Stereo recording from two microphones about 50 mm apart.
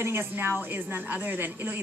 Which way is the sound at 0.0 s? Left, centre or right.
Right.